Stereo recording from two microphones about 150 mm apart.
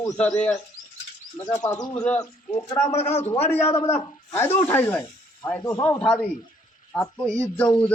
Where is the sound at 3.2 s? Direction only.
45° left (ahead or behind).